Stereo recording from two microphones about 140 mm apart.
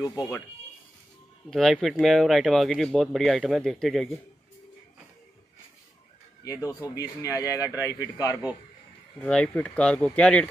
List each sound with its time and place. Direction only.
0.0 s speech: 25° left (ahead or behind)
1.5 s speech: centre (ahead or behind)
7.0 s speech: 25° left (ahead or behind)
9.2 s speech: 5° left (ahead or behind)